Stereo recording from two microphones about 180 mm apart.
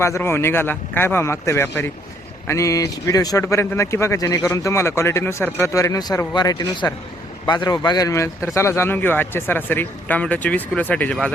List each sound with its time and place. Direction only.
0.0 s speech: 15° left (ahead or behind)